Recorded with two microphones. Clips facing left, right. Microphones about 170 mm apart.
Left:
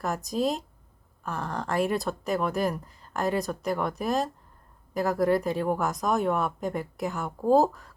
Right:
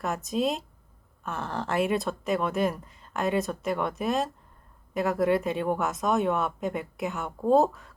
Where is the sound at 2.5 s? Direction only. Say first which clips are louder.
Right 1 dB; 20° right (ahead or behind).